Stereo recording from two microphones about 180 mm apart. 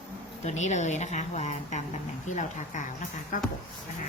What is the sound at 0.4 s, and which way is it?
Speech, 40° left (ahead or behind).